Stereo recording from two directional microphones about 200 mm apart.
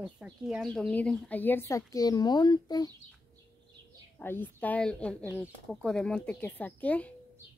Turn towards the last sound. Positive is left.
turn(degrees=5)  # may be behind; listen again after turning